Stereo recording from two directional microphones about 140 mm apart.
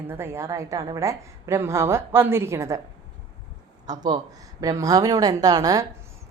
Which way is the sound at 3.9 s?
30° right (ahead or behind).